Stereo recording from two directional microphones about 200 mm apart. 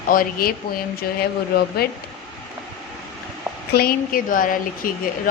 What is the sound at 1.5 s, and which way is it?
Speech, 50° left (ahead or behind).